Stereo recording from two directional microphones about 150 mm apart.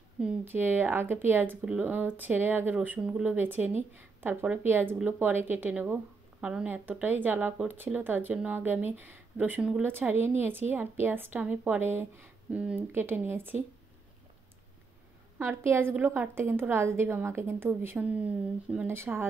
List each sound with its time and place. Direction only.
0.2 s speech: 15° right (ahead or behind)
15.3 s speech: 15° right (ahead or behind)